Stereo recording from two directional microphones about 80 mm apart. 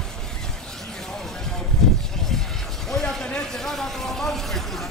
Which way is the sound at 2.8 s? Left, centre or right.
Centre.